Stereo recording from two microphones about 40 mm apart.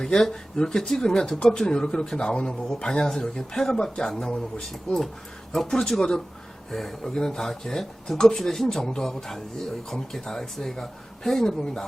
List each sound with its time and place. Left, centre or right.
0.0 s a man's voice: centre
6.0 s speech: centre